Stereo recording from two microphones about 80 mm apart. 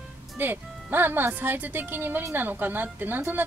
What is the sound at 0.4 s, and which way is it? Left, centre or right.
A woman's voice, right.